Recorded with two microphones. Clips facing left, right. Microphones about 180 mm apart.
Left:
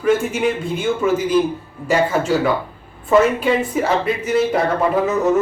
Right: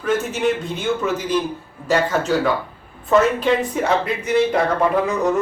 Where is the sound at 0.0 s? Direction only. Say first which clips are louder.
Left 3 dB; 10° left (ahead or behind).